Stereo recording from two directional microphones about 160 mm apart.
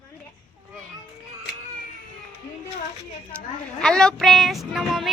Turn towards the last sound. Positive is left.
turn(degrees=0)  # may be behind; listen again after turning